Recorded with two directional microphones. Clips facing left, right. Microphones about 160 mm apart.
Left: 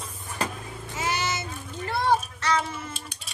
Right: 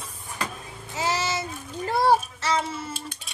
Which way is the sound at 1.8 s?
40° right (ahead or behind).